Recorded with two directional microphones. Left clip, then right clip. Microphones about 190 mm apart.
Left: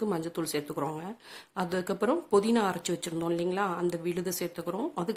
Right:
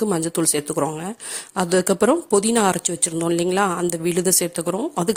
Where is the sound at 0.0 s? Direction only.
40° right (ahead or behind).